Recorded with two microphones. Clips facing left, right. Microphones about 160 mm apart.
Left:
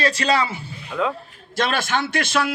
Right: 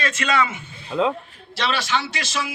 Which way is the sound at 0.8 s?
30° right (ahead or behind).